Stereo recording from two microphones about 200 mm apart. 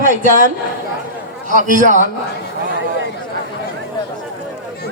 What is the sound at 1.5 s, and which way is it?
Speech, 40° right (ahead or behind).